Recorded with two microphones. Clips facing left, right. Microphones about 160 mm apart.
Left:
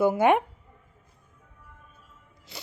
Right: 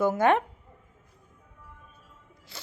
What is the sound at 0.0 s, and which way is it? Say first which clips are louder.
Speech: left 2 dB; 10° left (ahead or behind).